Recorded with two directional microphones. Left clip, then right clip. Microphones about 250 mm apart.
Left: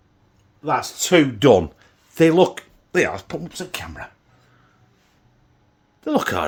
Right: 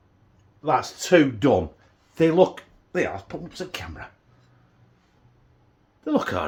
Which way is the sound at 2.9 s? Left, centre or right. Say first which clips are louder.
Left 6 dB; left.